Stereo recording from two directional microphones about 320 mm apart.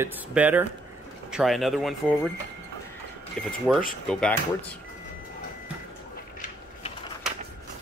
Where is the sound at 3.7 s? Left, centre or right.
Centre.